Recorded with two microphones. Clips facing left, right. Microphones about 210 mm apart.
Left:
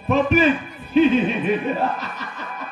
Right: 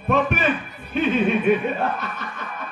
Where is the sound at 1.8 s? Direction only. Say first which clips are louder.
Left 1 dB; 55° right (ahead or behind).